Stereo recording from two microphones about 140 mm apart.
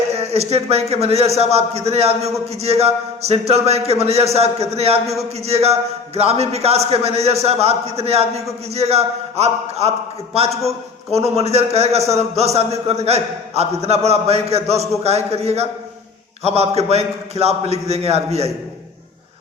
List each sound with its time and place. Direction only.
0.1 s a man's voice: 50° right (ahead or behind)